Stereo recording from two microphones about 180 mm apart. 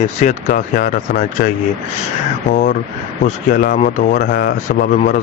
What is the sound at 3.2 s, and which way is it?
Speech, 45° left (ahead or behind).